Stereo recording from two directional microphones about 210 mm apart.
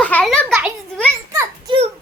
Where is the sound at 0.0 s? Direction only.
5° left (ahead or behind).